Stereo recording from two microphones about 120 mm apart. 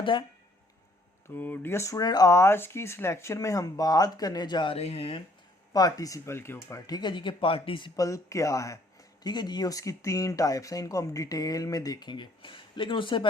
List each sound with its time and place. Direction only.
0.0 s speech: 40° left (ahead or behind)
1.3 s speech: 15° left (ahead or behind); by 4.8 s 40° left (ahead or behind)
4.8 s speech: 55° left (ahead or behind)
5.7 s speech: 30° left (ahead or behind)
8.0 s speech: 25° left (ahead or behind); by 13.2 s 45° left (ahead or behind)